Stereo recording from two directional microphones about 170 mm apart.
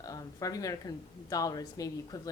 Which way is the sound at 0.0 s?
20° left (ahead or behind).